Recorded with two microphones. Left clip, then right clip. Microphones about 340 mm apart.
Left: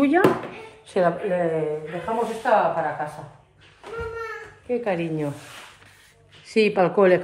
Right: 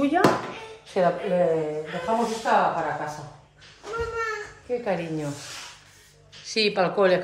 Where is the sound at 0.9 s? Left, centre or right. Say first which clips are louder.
Left 1 dB; left.